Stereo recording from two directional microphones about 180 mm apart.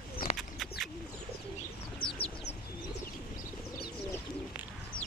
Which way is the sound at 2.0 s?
30° left (ahead or behind).